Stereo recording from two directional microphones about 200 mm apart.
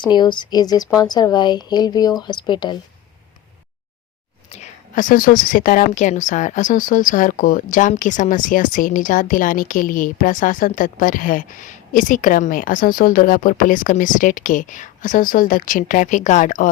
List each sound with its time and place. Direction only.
0.0 s speech: 20° left (ahead or behind)
4.4 s a woman's voice: 35° left (ahead or behind)